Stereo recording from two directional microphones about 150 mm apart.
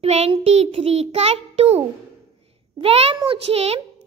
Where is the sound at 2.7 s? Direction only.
40° right (ahead or behind).